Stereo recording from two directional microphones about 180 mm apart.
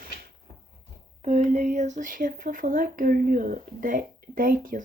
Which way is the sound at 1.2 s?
40° right (ahead or behind).